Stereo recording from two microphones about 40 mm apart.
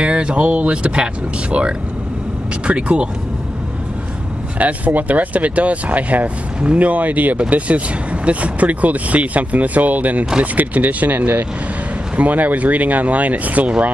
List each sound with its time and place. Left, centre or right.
0.0 s speech: right
4.6 s speech: right
11.1 s speech: right
12.2 s speech: right